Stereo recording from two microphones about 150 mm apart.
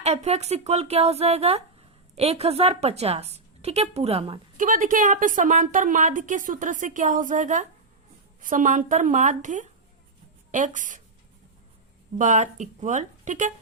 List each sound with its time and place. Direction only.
0.0 s speech: 45° right (ahead or behind)
4.5 s a woman's voice: 60° right (ahead or behind)
12.1 s a woman's voice: 55° right (ahead or behind)